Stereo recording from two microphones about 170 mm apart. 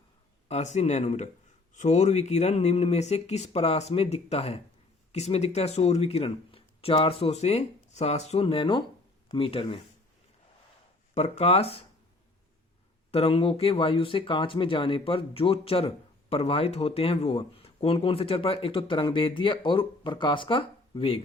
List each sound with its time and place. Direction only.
0.4 s speech: 40° left (ahead or behind)
11.1 s speech: 40° left (ahead or behind)
13.1 s speech: 35° left (ahead or behind)